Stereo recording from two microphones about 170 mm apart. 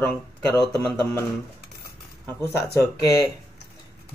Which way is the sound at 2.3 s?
15° left (ahead or behind).